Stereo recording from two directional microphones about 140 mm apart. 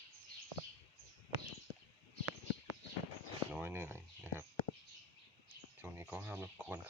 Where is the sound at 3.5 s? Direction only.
15° right (ahead or behind).